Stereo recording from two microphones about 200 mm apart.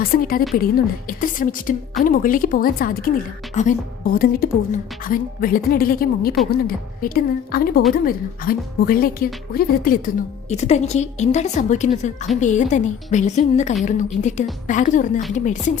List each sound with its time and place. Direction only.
0.0 s a woman's voice: 45° left (ahead or behind)
10.5 s a woman's voice: 35° left (ahead or behind)